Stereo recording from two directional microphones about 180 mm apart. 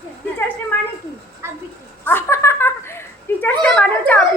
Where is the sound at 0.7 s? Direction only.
10° left (ahead or behind).